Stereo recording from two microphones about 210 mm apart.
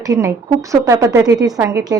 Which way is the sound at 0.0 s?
15° right (ahead or behind).